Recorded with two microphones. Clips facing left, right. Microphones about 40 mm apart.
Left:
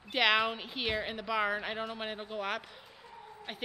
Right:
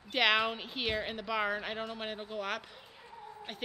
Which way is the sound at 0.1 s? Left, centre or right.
Centre.